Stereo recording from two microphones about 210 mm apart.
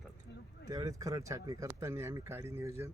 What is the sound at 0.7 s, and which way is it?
Speech, 15° right (ahead or behind).